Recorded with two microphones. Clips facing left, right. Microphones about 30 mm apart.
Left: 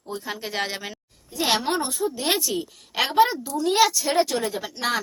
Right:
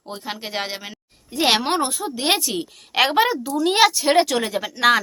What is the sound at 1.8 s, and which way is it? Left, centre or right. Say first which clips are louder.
A woman's voice: right 2 dB; right.